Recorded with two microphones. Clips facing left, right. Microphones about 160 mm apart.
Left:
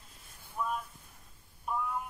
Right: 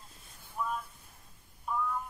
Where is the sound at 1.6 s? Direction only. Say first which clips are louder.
Right 1 dB; 20° left (ahead or behind).